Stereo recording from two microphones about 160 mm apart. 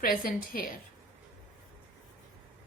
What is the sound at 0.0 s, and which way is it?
Speech, 65° left (ahead or behind).